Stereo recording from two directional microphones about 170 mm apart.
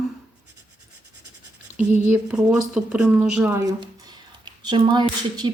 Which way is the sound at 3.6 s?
20° right (ahead or behind).